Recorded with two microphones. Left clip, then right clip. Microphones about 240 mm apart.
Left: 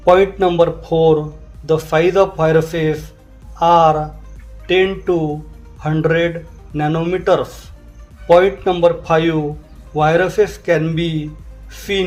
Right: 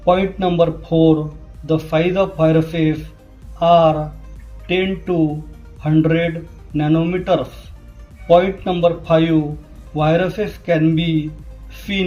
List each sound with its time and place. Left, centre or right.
0.0 s a man's voice: left